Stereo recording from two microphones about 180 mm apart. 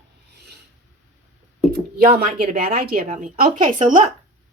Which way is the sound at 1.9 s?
55° right (ahead or behind).